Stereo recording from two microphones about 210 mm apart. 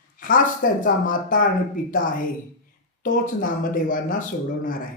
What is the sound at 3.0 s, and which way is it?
Speech, 40° left (ahead or behind).